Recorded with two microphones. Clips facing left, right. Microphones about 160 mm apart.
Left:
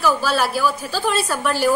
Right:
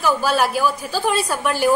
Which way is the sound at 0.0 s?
15° right (ahead or behind).